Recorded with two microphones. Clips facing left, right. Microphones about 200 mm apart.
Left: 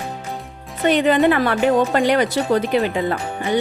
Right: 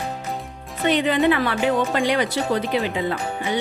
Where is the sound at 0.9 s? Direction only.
45° left (ahead or behind).